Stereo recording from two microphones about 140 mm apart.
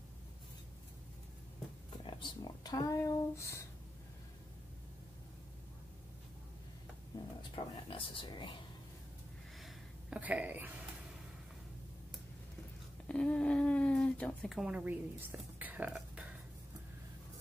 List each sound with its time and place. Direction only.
2.0 s speech: 35° left (ahead or behind)
7.5 s speech: 40° left (ahead or behind)
9.6 s a sound: 5° right (ahead or behind)
13.1 s speech: 10° left (ahead or behind); by 16.3 s 10° right (ahead or behind)